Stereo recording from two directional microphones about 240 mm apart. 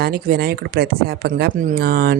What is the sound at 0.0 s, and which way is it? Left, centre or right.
Speech, right.